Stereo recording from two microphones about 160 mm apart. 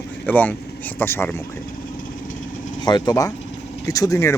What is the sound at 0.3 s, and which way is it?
Speech, 10° left (ahead or behind).